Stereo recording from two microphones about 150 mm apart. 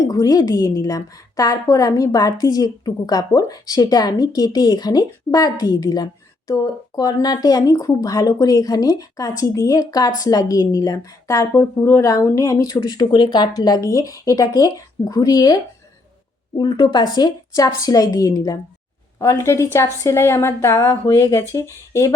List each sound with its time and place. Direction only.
0.1 s a woman's voice: 25° left (ahead or behind)
16.6 s a woman's voice: 30° left (ahead or behind)